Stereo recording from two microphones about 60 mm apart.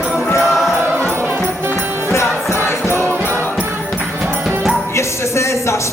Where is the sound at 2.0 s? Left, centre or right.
Left.